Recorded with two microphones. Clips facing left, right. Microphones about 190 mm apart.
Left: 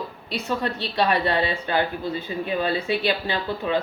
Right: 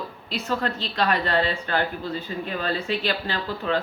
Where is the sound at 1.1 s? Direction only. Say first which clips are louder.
Left 1 dB; 15° left (ahead or behind).